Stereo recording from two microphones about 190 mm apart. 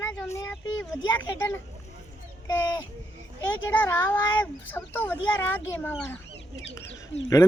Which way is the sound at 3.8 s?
10° left (ahead or behind).